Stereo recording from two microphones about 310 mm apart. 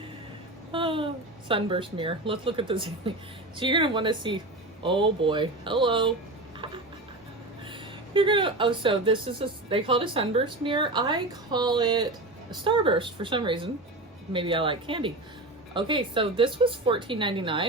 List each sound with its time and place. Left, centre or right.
0.7 s speech: centre
7.7 s speech: centre